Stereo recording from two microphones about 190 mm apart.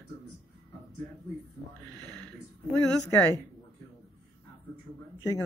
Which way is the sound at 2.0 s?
5° left (ahead or behind).